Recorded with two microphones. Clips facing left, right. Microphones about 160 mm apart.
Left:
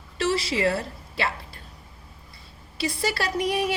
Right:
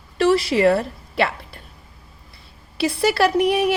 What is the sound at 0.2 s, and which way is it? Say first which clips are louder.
A woman's voice: right 8 dB; 55° right (ahead or behind).